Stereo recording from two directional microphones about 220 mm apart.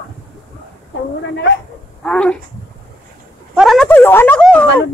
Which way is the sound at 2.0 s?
5° left (ahead or behind).